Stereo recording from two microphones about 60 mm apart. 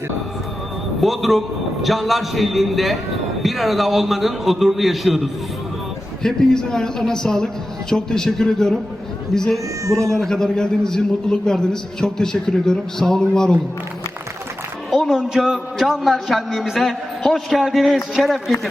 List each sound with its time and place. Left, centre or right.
1.0 s a man's voice: centre
6.2 s a man's voice: centre
9.8 s speech: right
10.2 s a man's voice: centre
14.8 s a sound: centre
15.2 s a man's voice: centre